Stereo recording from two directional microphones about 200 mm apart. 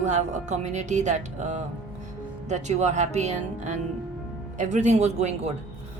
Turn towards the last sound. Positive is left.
turn(degrees=-35)  # may be behind; listen again after turning